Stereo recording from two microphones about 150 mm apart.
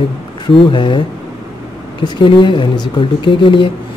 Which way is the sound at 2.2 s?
30° left (ahead or behind).